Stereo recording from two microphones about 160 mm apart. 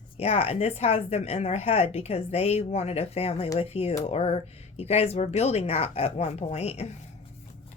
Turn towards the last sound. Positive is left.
turn(degrees=40)  # may be behind; listen again after turning